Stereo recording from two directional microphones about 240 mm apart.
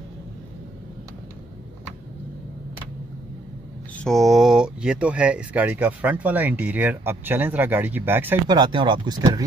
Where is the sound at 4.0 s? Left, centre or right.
Centre.